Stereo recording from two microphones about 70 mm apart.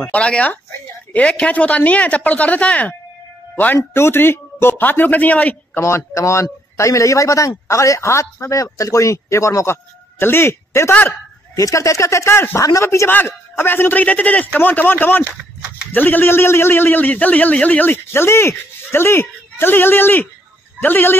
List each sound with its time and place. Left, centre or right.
0.0 s a man's voice: centre
5.8 s a man's voice: left
11.6 s a man's voice: left
13.1 s a man's voice: left